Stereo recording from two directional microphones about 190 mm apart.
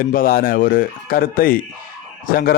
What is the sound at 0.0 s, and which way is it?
A man's voice, 45° left (ahead or behind).